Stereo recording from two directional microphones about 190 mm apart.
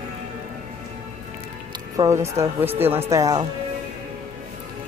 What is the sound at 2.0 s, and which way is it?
Speech, 15° right (ahead or behind).